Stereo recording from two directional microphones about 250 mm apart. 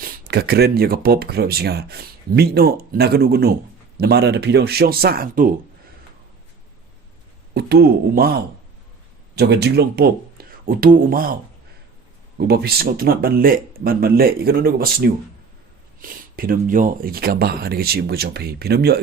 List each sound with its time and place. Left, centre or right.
0.0 s speech: right
7.5 s speech: right
12.4 s speech: right